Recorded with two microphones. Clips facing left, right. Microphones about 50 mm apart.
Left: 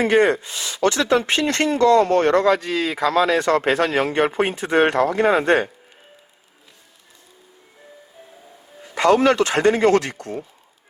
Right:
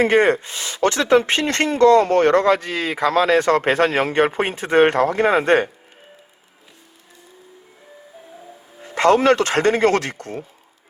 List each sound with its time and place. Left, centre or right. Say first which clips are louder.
0.0 s speech: right 1 dB; right
9.0 s speech: right 1 dB; right